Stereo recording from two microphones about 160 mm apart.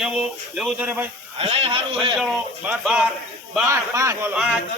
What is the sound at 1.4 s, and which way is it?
Speech, 35° right (ahead or behind).